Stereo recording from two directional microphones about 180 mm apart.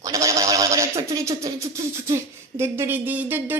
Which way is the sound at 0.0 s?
20° right (ahead or behind).